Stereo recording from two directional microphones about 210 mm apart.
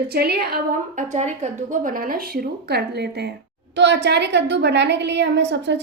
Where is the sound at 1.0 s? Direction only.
35° right (ahead or behind); by 5.8 s 55° right (ahead or behind).